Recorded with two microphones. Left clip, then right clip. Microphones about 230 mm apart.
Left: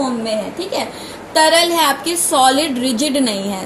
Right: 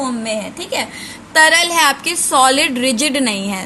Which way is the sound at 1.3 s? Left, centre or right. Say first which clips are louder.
Right 1 dB; right.